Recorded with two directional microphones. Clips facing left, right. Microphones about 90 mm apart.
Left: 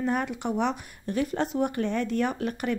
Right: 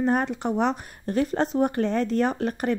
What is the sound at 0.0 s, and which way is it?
Speech, 35° right (ahead or behind).